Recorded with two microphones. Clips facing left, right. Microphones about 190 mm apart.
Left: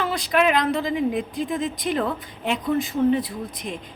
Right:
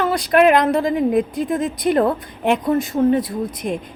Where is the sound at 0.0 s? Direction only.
55° right (ahead or behind).